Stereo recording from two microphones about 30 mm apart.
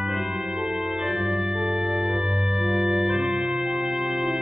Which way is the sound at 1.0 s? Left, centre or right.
Centre.